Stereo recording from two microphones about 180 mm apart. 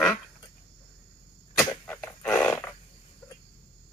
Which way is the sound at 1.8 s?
10° left (ahead or behind).